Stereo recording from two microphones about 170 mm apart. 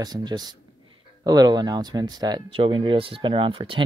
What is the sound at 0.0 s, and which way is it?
Speech, 25° right (ahead or behind).